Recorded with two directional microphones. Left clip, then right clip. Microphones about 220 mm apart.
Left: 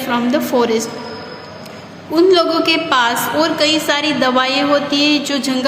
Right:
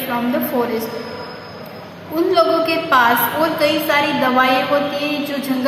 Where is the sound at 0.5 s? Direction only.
45° left (ahead or behind).